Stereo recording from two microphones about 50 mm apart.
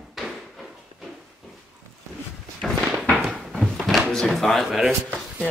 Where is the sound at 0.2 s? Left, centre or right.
Centre.